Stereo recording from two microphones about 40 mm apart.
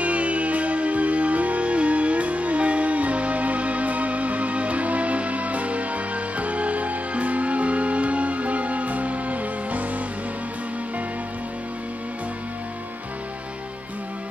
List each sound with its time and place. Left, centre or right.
0.0 s music: right